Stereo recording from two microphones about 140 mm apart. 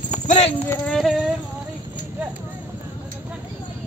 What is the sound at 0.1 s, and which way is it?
Clip-clop, 60° left (ahead or behind).